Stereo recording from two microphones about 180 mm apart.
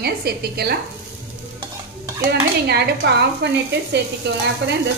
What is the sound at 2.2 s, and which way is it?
A woman's voice, 65° right (ahead or behind).